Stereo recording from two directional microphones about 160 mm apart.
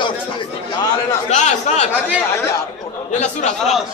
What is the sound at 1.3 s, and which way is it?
Speech, 45° left (ahead or behind).